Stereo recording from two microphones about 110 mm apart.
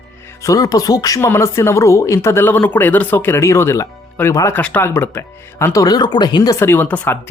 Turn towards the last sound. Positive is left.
turn(degrees=15)  # may be behind; listen again after turning